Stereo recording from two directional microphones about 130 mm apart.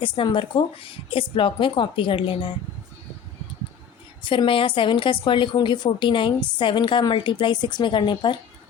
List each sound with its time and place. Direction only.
0.0 s a woman's voice: 40° left (ahead or behind)
4.2 s a woman's voice: 40° left (ahead or behind)